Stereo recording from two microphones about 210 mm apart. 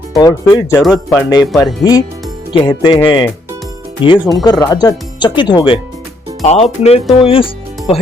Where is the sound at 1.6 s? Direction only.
15° left (ahead or behind).